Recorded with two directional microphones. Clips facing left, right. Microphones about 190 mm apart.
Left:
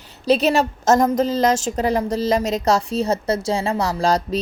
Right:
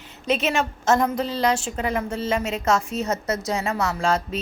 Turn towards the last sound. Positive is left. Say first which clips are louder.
# left 4 dB
turn(degrees=35)  # may be behind; listen again after turning